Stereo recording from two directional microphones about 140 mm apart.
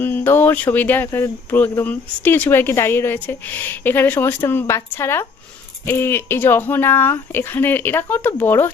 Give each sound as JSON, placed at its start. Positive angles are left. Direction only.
{"t": 0.0, "sound": "speech", "side_deg": 15}